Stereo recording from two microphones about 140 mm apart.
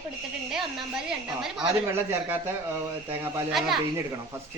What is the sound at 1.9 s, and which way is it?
Speech, 15° right (ahead or behind).